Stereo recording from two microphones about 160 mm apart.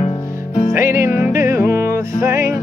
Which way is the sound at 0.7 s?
15° right (ahead or behind).